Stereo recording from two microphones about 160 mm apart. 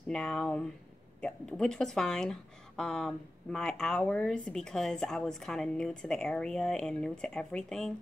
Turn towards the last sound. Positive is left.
turn(degrees=5)  # may be behind; listen again after turning